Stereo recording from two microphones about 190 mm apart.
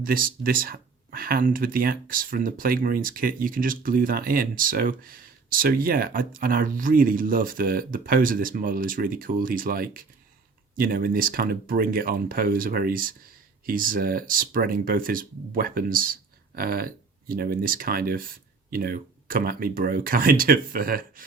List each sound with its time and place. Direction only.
0.0 s speech: 50° right (ahead or behind)